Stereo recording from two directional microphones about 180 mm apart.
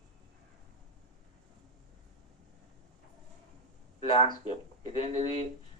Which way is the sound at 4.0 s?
25° left (ahead or behind).